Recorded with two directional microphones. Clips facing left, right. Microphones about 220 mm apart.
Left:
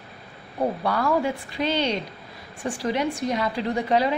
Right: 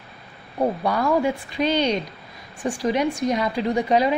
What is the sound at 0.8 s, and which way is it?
Speech, 15° right (ahead or behind).